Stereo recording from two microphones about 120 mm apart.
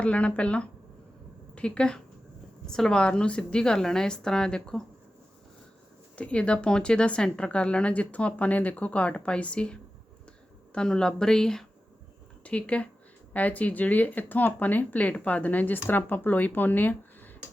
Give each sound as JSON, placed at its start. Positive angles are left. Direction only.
{"t": 0.0, "sound": "a woman's voice", "side_deg": 10}
{"t": 6.1, "sound": "a woman's voice", "side_deg": 10}